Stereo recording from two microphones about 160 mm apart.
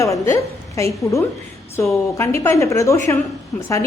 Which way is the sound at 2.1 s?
15° left (ahead or behind).